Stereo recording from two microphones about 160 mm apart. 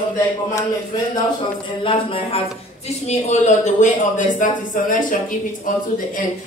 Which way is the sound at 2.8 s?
45° left (ahead or behind).